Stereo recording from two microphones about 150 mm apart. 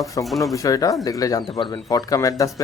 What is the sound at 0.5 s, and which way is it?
Speech, 20° left (ahead or behind).